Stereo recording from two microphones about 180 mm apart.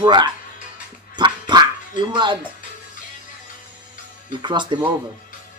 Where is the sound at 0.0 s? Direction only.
25° right (ahead or behind).